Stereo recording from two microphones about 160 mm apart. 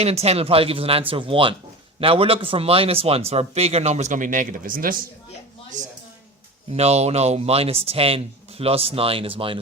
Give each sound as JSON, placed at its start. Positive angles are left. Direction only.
{"t": 0.0, "sound": "speech", "side_deg": -40}
{"t": 6.7, "sound": "speech", "side_deg": -40}